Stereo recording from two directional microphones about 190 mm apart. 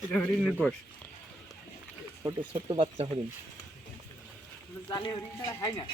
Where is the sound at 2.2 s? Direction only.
25° right (ahead or behind).